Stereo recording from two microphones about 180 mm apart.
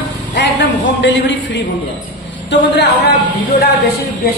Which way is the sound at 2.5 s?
70° left (ahead or behind).